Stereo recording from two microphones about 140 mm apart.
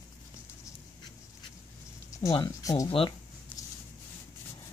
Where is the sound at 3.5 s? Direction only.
10° left (ahead or behind).